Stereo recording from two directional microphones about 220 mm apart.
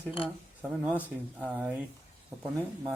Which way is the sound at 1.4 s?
5° right (ahead or behind).